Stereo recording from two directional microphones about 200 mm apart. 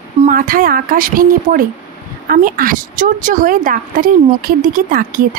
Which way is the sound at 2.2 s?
45° right (ahead or behind).